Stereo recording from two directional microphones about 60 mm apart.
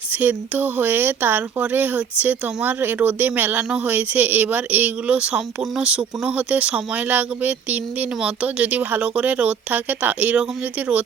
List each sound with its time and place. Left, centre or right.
0.1 s speech: right